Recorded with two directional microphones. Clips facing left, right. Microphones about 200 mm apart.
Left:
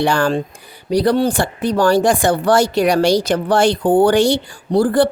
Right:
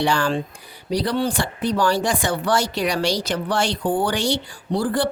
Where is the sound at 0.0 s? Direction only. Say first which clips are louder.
Left 5 dB; 50° left (ahead or behind).